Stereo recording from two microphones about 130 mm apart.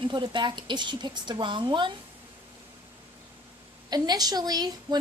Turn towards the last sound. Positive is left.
turn(degrees=-30)  # may be behind; listen again after turning